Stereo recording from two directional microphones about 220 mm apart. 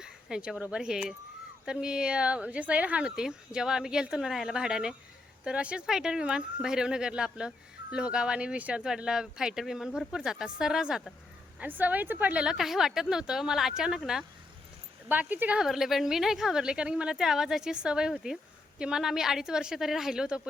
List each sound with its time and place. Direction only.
0.0 s speech: 5° right (ahead or behind)